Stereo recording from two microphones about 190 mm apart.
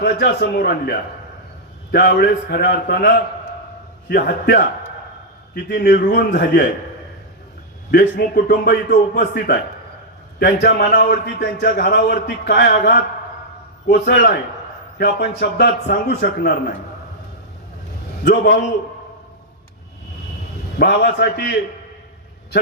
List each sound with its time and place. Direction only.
0.0 s a man's voice: 65° left (ahead or behind)
5.6 s a man's voice: 70° left (ahead or behind)
5.9 s a man's voice: 45° left (ahead or behind)
7.9 s a man's voice: 55° left (ahead or behind)
18.3 s a man's voice: 65° left (ahead or behind)
20.7 s a man's voice: 60° left (ahead or behind)